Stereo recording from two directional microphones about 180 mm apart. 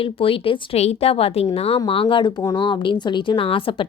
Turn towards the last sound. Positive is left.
turn(degrees=30)  # may be behind; listen again after turning